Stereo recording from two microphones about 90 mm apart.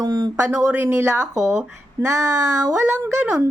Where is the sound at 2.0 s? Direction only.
35° right (ahead or behind).